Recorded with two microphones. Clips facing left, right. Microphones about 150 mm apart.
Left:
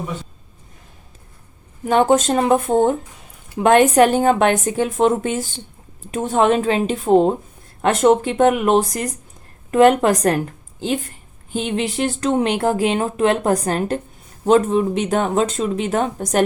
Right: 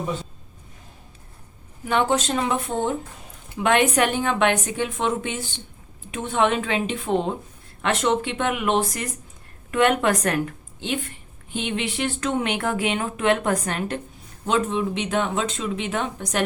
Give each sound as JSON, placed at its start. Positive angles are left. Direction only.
{"t": 1.8, "sound": "a woman's voice", "side_deg": 40}